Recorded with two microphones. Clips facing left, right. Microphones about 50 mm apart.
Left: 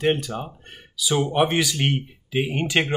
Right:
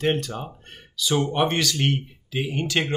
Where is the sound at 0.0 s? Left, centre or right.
Centre.